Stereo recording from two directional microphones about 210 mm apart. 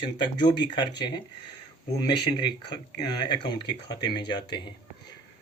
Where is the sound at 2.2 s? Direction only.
20° left (ahead or behind).